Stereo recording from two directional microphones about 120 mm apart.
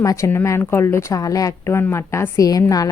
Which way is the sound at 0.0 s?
30° left (ahead or behind).